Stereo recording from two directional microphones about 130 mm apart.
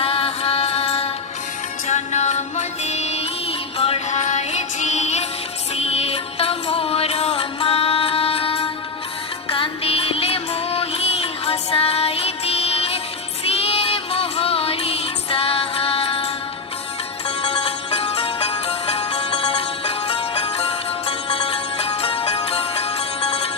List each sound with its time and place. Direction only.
0.0 s music: 45° left (ahead or behind)
1.9 s music: 65° left (ahead or behind)
4.2 s music: 65° left (ahead or behind); by 23.5 s 50° left (ahead or behind)